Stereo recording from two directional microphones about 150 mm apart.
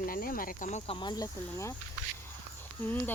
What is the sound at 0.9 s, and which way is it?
Speech, 30° left (ahead or behind).